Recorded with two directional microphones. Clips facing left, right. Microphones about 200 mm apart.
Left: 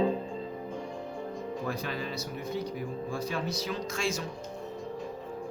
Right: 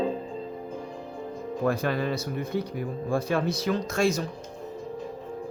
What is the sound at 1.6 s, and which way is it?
Speech, 55° right (ahead or behind).